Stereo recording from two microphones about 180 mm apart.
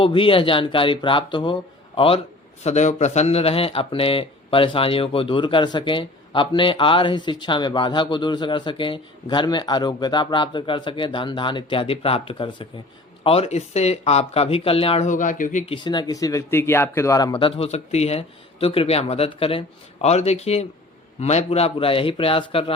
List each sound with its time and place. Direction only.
0.0 s speech: 30° left (ahead or behind); by 15.6 s 45° left (ahead or behind)
15.6 s speech: 25° left (ahead or behind)